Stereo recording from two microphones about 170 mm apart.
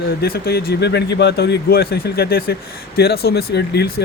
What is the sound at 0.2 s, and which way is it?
Speech, 65° left (ahead or behind).